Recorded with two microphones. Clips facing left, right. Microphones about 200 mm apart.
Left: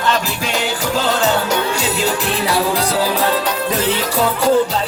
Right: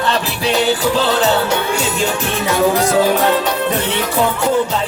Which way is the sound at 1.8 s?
35° left (ahead or behind).